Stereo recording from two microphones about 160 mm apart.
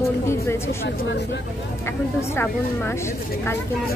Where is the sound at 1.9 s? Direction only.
15° left (ahead or behind).